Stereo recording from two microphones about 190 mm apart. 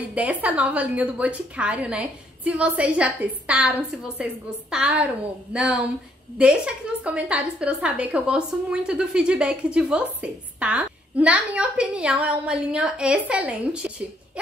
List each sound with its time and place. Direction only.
0.1 s a woman's voice: 5° right (ahead or behind)